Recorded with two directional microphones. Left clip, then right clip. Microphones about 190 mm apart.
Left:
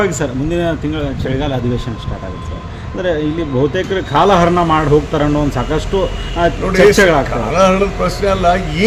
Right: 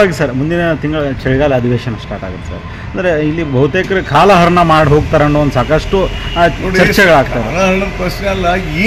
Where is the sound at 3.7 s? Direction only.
45° right (ahead or behind).